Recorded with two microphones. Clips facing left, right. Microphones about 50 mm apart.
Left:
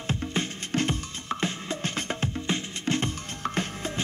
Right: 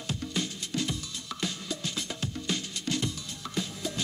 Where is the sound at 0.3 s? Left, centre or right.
Left.